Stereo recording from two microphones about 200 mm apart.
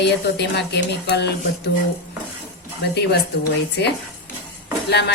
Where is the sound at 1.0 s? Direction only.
60° left (ahead or behind).